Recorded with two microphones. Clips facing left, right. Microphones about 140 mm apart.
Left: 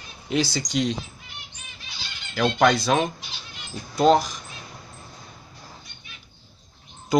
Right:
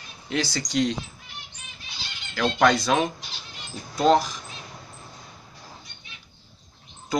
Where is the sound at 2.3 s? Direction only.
10° left (ahead or behind).